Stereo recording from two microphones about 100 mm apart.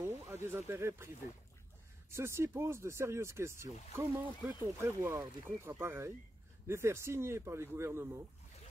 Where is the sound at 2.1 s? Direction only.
25° right (ahead or behind).